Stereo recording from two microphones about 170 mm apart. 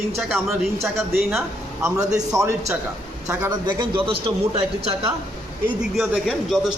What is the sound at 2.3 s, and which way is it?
A man's voice, 20° right (ahead or behind).